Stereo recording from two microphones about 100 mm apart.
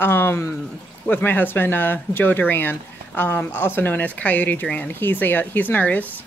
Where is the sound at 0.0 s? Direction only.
20° left (ahead or behind).